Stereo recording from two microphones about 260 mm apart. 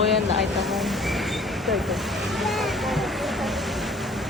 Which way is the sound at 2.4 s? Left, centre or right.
Centre.